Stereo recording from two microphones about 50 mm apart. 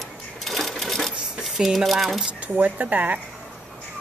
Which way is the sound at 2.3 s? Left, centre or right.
Right.